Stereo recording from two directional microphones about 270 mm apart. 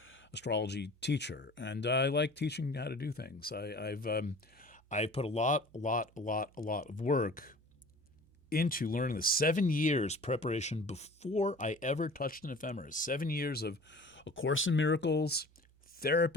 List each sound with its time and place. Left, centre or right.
0.0 s speech: left